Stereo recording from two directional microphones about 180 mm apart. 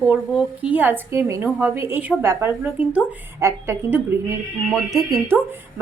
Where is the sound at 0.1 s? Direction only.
5° right (ahead or behind).